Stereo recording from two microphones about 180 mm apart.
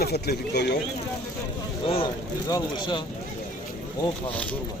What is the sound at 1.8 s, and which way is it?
Speech, 30° left (ahead or behind).